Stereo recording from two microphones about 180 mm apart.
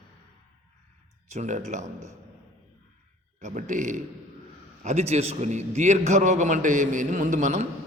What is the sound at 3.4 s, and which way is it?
A man's voice, 45° right (ahead or behind).